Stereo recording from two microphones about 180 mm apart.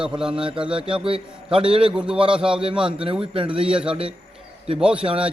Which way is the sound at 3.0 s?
30° right (ahead or behind).